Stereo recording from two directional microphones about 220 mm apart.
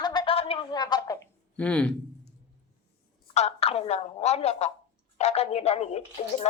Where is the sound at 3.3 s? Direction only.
30° left (ahead or behind).